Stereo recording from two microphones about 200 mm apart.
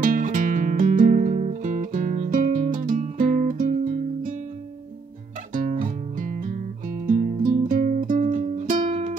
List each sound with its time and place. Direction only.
0.0 s music: 40° right (ahead or behind)
5.5 s music: 40° right (ahead or behind)